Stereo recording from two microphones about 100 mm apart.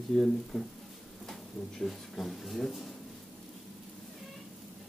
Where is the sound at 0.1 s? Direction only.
5° left (ahead or behind).